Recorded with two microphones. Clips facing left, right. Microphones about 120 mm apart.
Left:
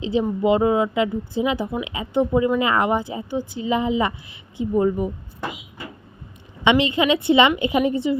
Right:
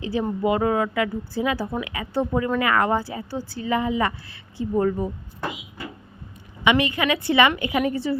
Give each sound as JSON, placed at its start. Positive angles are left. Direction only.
{"t": 0.0, "sound": "speech", "side_deg": 20}
{"t": 6.7, "sound": "speech", "side_deg": 20}